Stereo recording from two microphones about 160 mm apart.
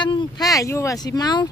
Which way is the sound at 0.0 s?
25° left (ahead or behind).